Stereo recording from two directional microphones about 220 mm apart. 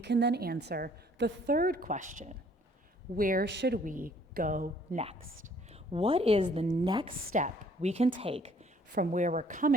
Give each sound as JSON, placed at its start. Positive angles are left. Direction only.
{"t": 0.0, "sound": "a woman's voice", "side_deg": -50}
{"t": 3.8, "sound": "speech", "side_deg": -40}
{"t": 5.7, "sound": "a woman's voice", "side_deg": -25}
{"t": 7.3, "sound": "a woman's voice", "side_deg": -30}